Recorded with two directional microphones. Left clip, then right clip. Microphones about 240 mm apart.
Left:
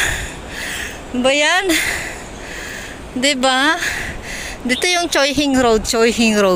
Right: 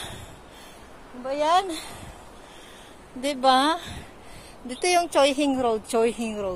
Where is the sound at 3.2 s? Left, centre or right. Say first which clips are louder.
Left 6 dB; centre.